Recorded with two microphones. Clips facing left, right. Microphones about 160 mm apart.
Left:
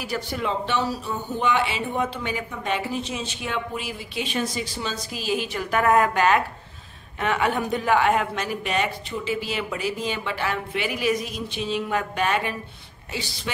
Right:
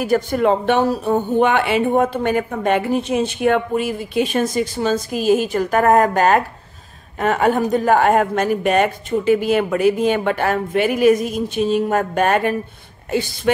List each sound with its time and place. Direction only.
0.0 s speech: 50° right (ahead or behind)